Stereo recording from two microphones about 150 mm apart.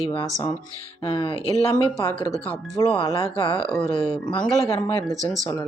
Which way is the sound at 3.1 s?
35° left (ahead or behind).